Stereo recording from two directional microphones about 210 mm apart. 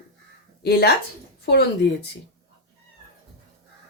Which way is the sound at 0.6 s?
50° left (ahead or behind).